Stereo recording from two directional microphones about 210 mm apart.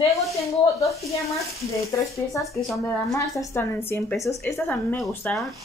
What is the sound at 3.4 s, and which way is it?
Speech, 15° left (ahead or behind).